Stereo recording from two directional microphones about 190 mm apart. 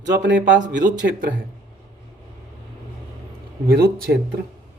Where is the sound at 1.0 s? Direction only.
55° right (ahead or behind).